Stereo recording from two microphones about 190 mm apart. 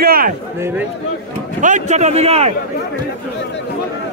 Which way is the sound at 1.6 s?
40° right (ahead or behind).